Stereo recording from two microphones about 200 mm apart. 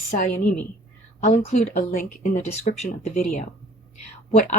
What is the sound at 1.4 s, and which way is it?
Speech, 35° left (ahead or behind).